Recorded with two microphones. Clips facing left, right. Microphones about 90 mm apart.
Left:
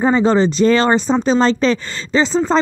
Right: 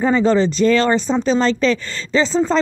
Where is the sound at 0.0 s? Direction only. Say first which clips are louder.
Left 1 dB; 20° left (ahead or behind).